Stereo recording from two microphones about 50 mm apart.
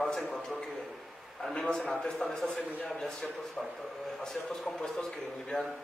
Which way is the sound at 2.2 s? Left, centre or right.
Centre.